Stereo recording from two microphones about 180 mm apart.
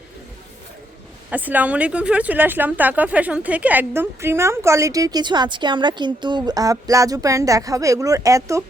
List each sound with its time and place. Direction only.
1.3 s speech: 10° right (ahead or behind)